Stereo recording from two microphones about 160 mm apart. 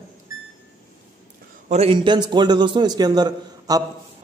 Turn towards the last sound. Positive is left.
turn(degrees=-25)  # may be behind; listen again after turning